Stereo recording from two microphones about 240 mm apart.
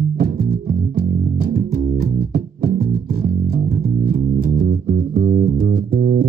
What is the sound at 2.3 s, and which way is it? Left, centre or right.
Music, right.